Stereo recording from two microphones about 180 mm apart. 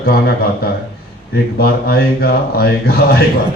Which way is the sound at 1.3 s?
60° left (ahead or behind).